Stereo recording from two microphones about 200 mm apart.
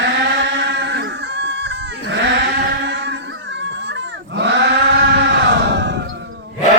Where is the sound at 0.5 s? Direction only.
60° right (ahead or behind).